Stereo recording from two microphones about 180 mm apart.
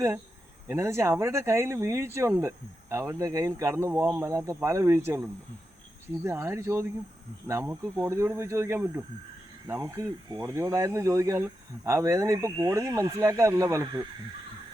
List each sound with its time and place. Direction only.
0.7 s speech: 15° right (ahead or behind)